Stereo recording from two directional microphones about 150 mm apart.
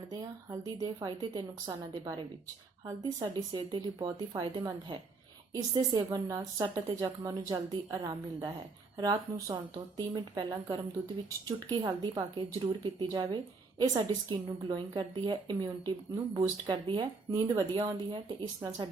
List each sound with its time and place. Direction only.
0.1 s a woman's voice: 25° right (ahead or behind)
13.1 s a woman's voice: 25° right (ahead or behind)